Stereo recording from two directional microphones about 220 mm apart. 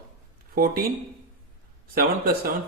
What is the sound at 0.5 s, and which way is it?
Speech, 40° right (ahead or behind).